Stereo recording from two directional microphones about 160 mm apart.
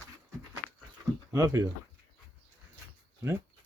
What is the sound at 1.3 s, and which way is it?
Speech, 15° right (ahead or behind).